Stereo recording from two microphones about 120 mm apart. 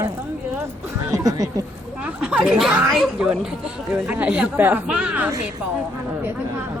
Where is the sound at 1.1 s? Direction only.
30° right (ahead or behind).